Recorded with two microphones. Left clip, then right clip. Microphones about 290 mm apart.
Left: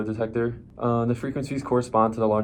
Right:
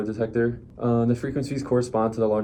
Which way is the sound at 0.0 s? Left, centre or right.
Centre.